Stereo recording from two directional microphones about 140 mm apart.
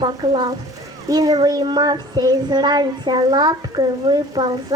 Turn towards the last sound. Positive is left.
turn(degrees=-30)  # may be behind; listen again after turning